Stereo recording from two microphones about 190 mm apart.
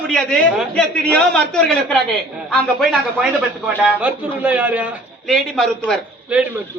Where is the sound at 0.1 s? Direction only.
5° left (ahead or behind).